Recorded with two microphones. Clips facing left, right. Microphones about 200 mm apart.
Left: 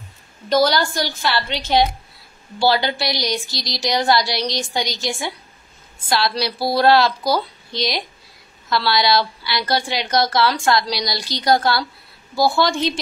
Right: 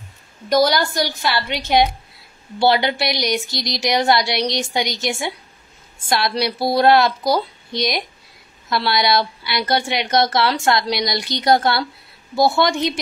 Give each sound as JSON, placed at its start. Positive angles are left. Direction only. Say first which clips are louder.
{"t": 0.5, "sound": "a woman's voice", "louder": "right 1 dB", "side_deg": -20}
{"t": 8.6, "sound": "a woman's voice", "louder": "even", "side_deg": -20}